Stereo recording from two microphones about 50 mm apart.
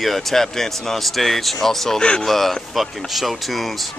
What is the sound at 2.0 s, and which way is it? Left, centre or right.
Speech, centre.